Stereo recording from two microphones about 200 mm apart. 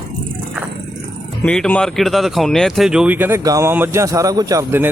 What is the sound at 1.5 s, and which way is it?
Speech, 5° left (ahead or behind).